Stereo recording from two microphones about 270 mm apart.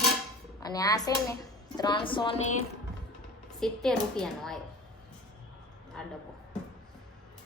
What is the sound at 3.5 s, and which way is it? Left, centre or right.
A woman's voice, centre.